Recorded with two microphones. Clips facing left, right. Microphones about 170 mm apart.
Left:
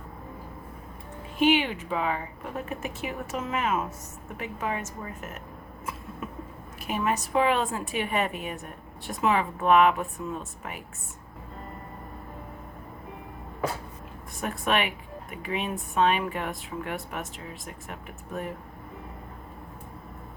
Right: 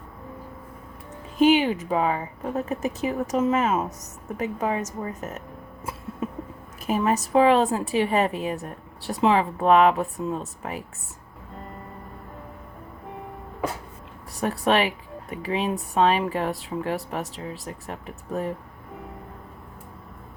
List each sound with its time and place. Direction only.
1.4 s speech: 40° right (ahead or behind)
6.8 s speech: 35° right (ahead or behind)
14.3 s speech: 35° right (ahead or behind)